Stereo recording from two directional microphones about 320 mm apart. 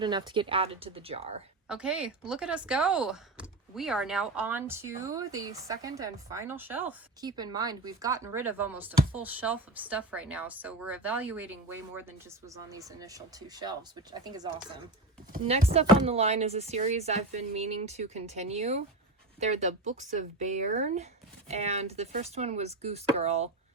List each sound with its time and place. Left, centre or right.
0.0 s speech: centre
1.6 s speech: centre